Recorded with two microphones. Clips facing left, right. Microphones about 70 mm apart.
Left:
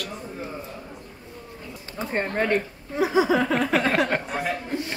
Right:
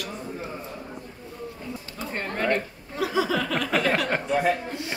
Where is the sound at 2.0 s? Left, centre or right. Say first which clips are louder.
Left 6 dB; left.